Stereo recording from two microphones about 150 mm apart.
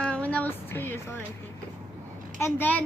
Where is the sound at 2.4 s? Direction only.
10° left (ahead or behind).